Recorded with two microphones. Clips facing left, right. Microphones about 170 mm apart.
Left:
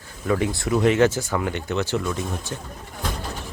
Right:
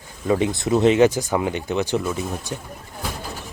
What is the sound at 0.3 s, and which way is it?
Speech, 20° right (ahead or behind).